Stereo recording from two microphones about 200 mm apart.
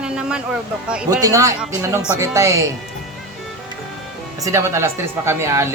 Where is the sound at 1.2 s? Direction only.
15° right (ahead or behind).